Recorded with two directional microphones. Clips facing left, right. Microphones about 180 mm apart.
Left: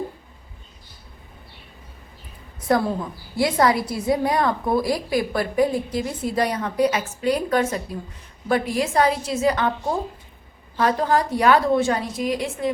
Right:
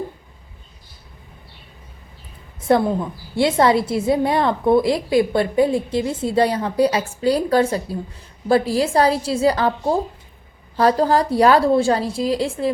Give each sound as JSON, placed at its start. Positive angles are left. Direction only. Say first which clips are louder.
{"t": 2.6, "sound": "a sound", "louder": "right 4 dB", "side_deg": -25}
{"t": 3.3, "sound": "a woman's voice", "louder": "right 3 dB", "side_deg": -25}
{"t": 10.8, "sound": "a woman's voice", "louder": "right 4 dB", "side_deg": -35}